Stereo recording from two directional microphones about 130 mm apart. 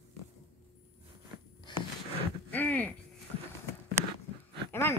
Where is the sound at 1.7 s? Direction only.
35° left (ahead or behind).